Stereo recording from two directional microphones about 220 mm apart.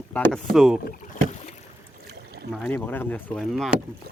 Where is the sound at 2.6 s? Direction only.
10° left (ahead or behind).